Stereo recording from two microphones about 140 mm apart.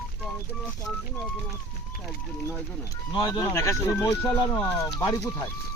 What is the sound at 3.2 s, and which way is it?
Speech, 30° left (ahead or behind).